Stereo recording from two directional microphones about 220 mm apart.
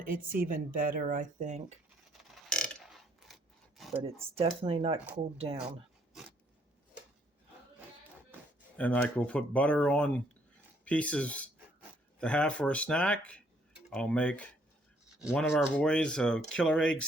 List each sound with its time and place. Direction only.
0.0 s speech: 40° right (ahead or behind)
2.3 s mechanisms: centre (ahead or behind)
4.0 s speech: 25° right (ahead or behind)
8.8 s speech: 5° left (ahead or behind)